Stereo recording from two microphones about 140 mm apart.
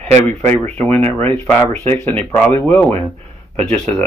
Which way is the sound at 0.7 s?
15° left (ahead or behind).